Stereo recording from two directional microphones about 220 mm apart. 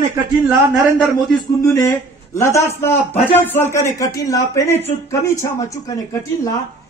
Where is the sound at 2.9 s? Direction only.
30° left (ahead or behind).